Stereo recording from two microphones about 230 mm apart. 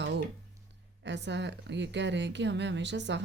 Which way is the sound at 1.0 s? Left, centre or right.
Right.